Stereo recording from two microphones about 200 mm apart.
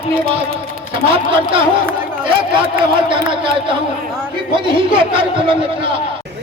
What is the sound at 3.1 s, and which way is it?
A man's voice, 25° right (ahead or behind).